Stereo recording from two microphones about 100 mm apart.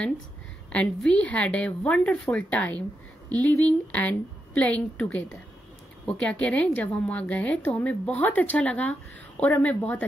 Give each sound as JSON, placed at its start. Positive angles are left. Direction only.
{"t": 0.7, "sound": "a woman's voice", "side_deg": 10}